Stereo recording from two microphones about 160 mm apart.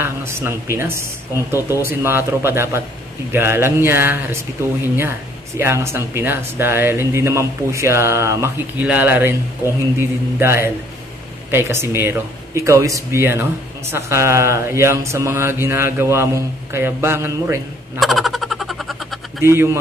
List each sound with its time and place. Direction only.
0.0 s speech: 15° right (ahead or behind)
17.9 s a sound: centre (ahead or behind)
19.4 s speech: 15° right (ahead or behind)